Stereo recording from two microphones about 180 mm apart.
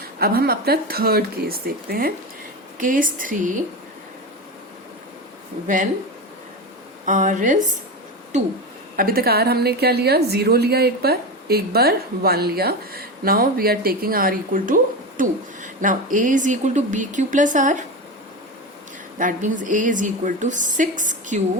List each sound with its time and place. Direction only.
0.2 s a woman's voice: 60° right (ahead or behind)
5.6 s speech: 45° right (ahead or behind)
7.0 s speech: 45° right (ahead or behind)
9.0 s a woman's voice: 55° right (ahead or behind)
19.2 s speech: 45° right (ahead or behind)